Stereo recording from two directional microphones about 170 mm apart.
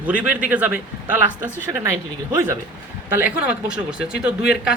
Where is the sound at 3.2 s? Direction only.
10° right (ahead or behind).